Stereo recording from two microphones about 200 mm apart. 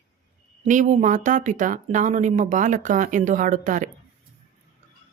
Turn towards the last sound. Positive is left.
turn(degrees=-40)  # may be behind; listen again after turning